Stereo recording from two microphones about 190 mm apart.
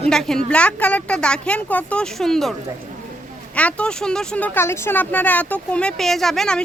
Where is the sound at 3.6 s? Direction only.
5° left (ahead or behind).